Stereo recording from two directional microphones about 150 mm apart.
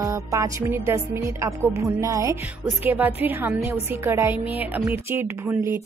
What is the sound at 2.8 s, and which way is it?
Speech, 10° right (ahead or behind).